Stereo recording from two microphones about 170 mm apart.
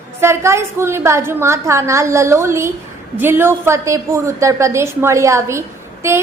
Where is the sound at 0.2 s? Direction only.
15° right (ahead or behind).